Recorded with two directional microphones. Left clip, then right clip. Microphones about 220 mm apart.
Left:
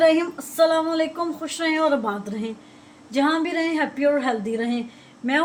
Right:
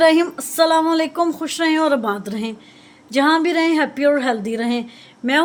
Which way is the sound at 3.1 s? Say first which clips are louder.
Right 6 dB; 40° right (ahead or behind).